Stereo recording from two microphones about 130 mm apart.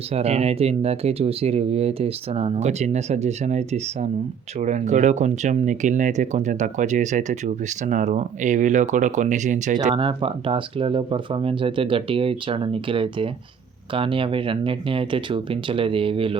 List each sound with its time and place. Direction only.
0.1 s speech: 55° right (ahead or behind); by 9.7 s 70° right (ahead or behind)
9.9 s speech: 40° right (ahead or behind)